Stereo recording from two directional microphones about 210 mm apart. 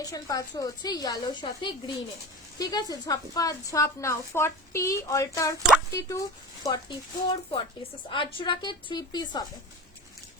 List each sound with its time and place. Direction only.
0.0 s a woman's voice: 15° left (ahead or behind)